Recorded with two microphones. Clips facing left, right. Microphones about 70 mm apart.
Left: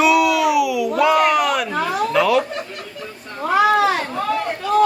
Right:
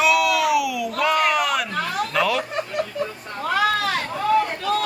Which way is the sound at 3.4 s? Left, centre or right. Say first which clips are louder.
Left 6 dB; centre.